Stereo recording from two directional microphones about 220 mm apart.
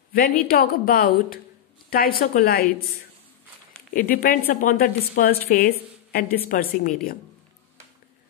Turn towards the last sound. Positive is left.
turn(degrees=40)  # may be behind; listen again after turning